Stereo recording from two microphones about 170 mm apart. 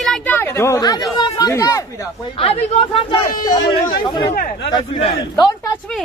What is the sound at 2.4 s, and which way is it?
Speech, 35° left (ahead or behind).